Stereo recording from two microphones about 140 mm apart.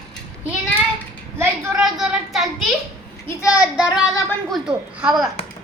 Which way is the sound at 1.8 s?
5° right (ahead or behind).